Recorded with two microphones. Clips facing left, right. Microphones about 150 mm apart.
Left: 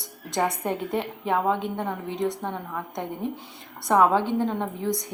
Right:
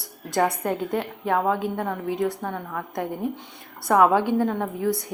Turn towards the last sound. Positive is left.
turn(degrees=-5)  # may be behind; listen again after turning